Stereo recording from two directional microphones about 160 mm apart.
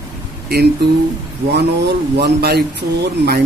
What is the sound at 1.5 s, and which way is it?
Speech, 90° right.